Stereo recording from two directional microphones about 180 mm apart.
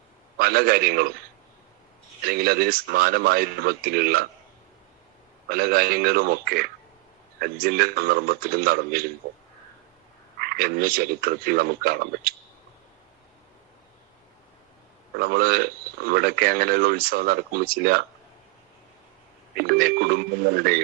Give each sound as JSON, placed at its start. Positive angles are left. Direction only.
{"t": 0.3, "sound": "speech", "side_deg": -55}
{"t": 2.2, "sound": "speech", "side_deg": -55}
{"t": 5.5, "sound": "speech", "side_deg": -55}
{"t": 10.4, "sound": "speech", "side_deg": -55}
{"t": 15.2, "sound": "speech", "side_deg": -55}
{"t": 19.5, "sound": "speech", "side_deg": -55}